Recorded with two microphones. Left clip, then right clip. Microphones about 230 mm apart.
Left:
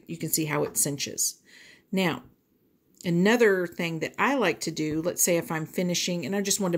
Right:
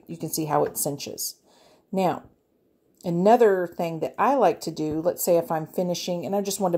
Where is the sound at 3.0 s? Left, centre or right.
Centre.